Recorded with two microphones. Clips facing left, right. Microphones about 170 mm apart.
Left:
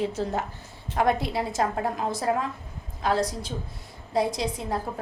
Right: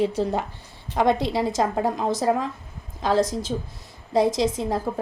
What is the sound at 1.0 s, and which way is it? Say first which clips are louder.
Speech: right 3 dB; 90° right.